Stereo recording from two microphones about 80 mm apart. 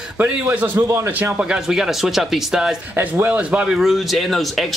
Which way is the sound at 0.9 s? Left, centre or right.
Right.